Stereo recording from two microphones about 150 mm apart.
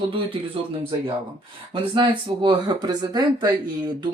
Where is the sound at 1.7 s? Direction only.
30° right (ahead or behind).